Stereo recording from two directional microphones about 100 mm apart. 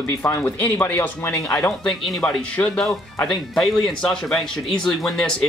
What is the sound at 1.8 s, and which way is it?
Speech, 10° left (ahead or behind).